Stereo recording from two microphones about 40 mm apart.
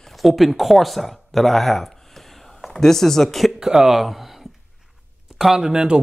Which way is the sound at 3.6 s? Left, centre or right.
Centre.